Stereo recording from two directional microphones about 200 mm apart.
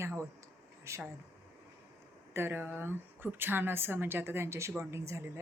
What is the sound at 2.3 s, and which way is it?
Speech, 10° right (ahead or behind).